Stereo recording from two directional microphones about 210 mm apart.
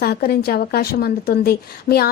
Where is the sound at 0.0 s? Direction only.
45° left (ahead or behind).